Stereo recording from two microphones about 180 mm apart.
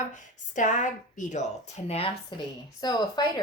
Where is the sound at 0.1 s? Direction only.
45° left (ahead or behind).